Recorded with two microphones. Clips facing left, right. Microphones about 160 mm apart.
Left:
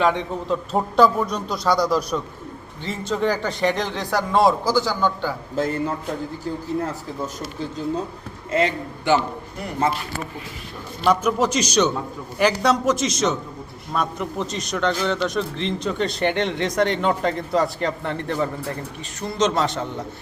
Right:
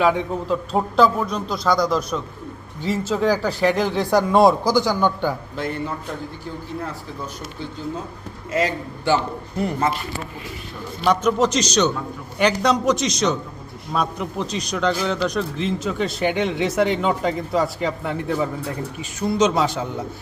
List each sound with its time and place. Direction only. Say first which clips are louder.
0.0 s a man's voice: right 2 dB; 5° right (ahead or behind)
5.5 s speech: left 3 dB; 40° left (ahead or behind)
8.5 s a man's voice: left 1 dB; 25° left (ahead or behind)
11.0 s a man's voice: right 1 dB; 5° left (ahead or behind)